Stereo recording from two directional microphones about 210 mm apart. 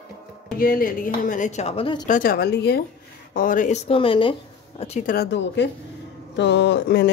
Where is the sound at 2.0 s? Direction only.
40° left (ahead or behind).